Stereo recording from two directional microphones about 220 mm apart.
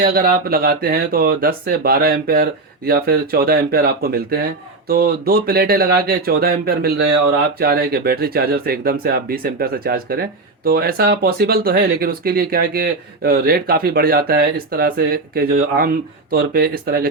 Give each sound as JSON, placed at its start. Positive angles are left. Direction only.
{"t": 0.0, "sound": "speech", "side_deg": -45}